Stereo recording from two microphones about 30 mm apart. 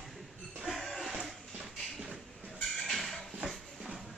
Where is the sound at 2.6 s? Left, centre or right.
Centre.